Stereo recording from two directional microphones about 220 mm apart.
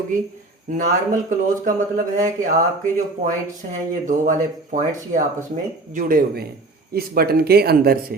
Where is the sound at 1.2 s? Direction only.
35° right (ahead or behind).